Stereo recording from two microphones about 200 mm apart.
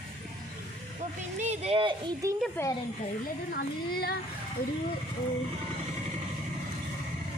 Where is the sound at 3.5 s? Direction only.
50° left (ahead or behind).